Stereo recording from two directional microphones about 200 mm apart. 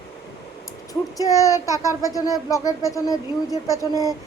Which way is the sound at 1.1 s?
15° left (ahead or behind).